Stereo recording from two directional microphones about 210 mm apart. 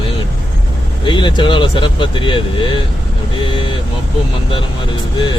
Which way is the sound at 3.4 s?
25° left (ahead or behind).